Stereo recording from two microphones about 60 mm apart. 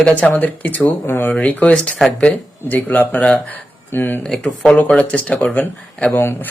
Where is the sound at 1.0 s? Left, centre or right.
Left.